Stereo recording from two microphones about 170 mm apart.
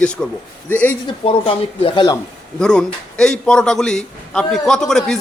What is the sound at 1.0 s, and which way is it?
Speech, 35° left (ahead or behind).